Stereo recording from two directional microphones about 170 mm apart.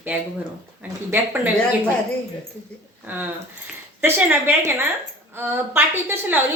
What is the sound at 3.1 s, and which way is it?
Speech, 10° right (ahead or behind).